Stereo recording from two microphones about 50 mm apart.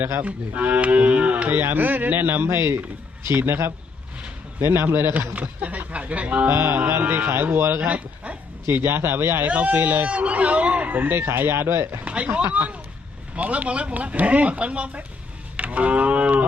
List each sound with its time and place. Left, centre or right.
0.2 s livestock: right
2.6 s a man's voice: right
5.3 s speech: right
6.5 s a man's voice: right
7.8 s speech: right
8.7 s speech: right
9.5 s speech: right
11.1 s speech: right
12.0 s speech: right
12.5 s livestock: right
13.3 s speech: right
15.5 s cattle: right